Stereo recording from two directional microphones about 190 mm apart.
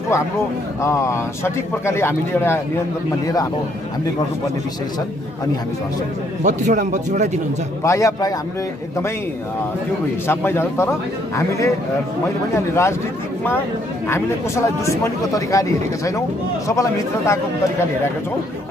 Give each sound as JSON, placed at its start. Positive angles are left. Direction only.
{"t": 0.8, "sound": "speech", "side_deg": 15}
{"t": 6.4, "sound": "a man's voice", "side_deg": -40}
{"t": 7.8, "sound": "speech", "side_deg": 15}
{"t": 10.2, "sound": "speech", "side_deg": 10}
{"t": 14.0, "sound": "speech", "side_deg": 15}